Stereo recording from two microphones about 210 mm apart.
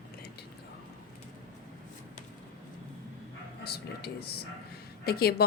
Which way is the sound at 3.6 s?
50° left (ahead or behind).